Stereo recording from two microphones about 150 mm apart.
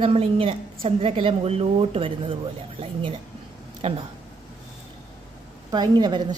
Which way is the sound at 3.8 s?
40° right (ahead or behind).